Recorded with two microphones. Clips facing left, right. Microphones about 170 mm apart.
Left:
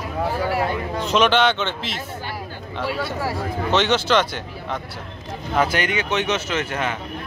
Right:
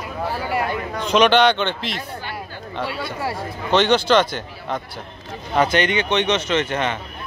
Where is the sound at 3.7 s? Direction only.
5° left (ahead or behind).